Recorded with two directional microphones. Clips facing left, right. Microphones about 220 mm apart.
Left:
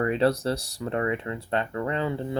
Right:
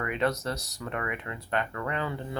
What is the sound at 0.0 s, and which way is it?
Speech, 30° left (ahead or behind).